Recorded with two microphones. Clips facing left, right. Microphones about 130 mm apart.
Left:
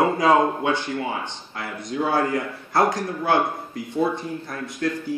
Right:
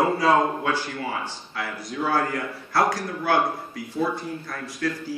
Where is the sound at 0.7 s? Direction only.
20° left (ahead or behind).